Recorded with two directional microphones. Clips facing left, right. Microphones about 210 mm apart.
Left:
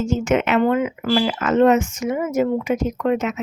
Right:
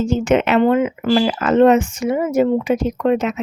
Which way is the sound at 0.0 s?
35° right (ahead or behind).